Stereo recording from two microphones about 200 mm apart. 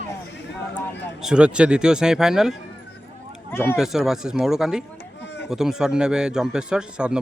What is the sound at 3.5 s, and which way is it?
Speech, 10° left (ahead or behind).